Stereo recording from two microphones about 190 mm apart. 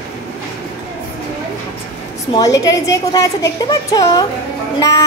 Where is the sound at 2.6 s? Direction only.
20° left (ahead or behind).